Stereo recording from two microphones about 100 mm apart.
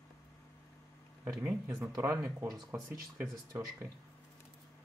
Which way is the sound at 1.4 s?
20° right (ahead or behind).